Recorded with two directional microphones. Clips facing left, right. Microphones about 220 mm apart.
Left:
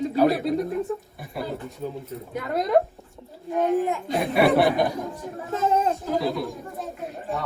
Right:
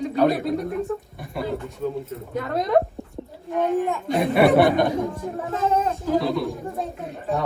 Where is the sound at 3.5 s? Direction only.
Centre (ahead or behind).